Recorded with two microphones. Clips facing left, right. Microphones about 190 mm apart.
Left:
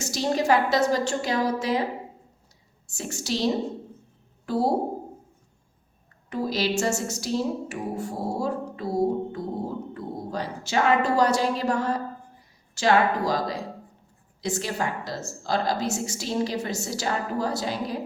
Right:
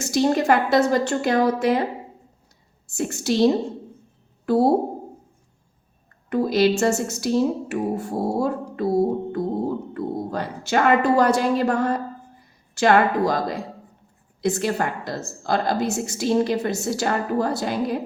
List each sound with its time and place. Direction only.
0.0 s a woman's voice: 55° right (ahead or behind)
2.9 s a woman's voice: 55° right (ahead or behind)
6.3 s a woman's voice: 55° right (ahead or behind)